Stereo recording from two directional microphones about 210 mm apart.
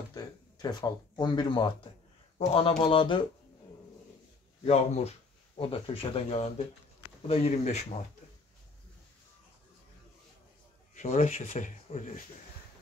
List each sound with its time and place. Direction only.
0.1 s speech: 20° left (ahead or behind)
4.6 s speech: 30° left (ahead or behind)
11.0 s speech: 35° left (ahead or behind)